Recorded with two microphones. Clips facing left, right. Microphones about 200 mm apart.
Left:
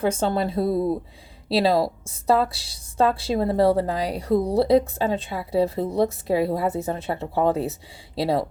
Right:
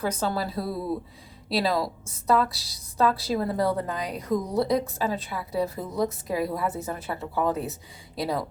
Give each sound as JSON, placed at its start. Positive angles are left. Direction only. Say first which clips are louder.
{"t": 0.0, "sound": "a woman's voice", "louder": "left 5 dB", "side_deg": 25}